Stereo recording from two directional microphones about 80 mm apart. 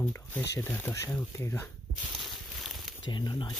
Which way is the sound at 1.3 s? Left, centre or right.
Left.